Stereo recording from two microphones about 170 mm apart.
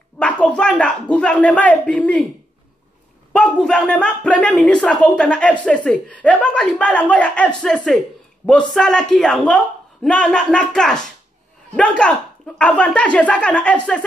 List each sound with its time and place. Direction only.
0.2 s speech: 5° left (ahead or behind)
3.3 s speech: 5° left (ahead or behind)